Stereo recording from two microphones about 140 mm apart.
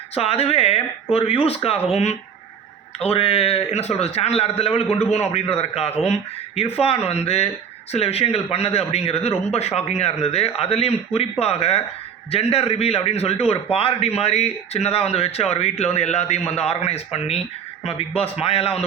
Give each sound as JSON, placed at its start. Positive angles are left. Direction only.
{"t": 0.1, "sound": "a man's voice", "side_deg": 45}